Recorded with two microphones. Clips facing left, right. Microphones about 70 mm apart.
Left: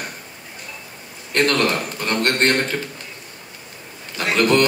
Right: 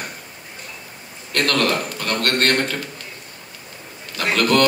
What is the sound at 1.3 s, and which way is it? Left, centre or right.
A man's voice, left.